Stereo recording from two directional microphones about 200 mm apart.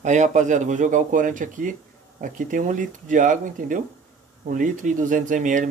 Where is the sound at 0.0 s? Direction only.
35° right (ahead or behind).